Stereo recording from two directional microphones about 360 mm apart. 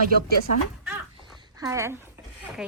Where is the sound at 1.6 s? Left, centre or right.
Centre.